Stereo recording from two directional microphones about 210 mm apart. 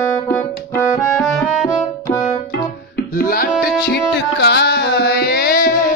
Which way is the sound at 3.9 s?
50° left (ahead or behind).